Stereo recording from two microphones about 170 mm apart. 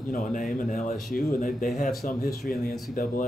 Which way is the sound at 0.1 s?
50° left (ahead or behind).